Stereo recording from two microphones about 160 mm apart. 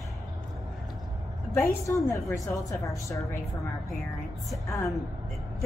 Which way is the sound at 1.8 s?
20° left (ahead or behind).